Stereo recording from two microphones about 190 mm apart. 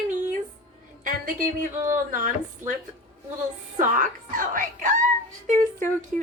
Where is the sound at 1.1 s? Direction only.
45° right (ahead or behind).